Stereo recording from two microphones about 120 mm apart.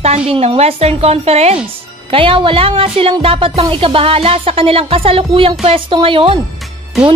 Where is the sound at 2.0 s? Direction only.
50° right (ahead or behind).